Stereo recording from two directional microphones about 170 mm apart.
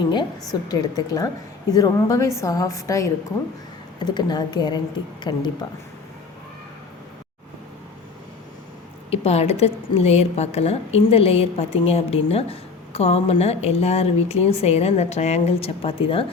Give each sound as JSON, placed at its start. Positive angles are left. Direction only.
{"t": 0.0, "sound": "a woman's voice", "side_deg": 25}
{"t": 9.0, "sound": "a woman's voice", "side_deg": 40}